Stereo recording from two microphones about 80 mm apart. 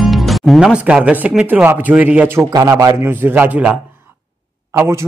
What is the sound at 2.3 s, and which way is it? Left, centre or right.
Speech, right.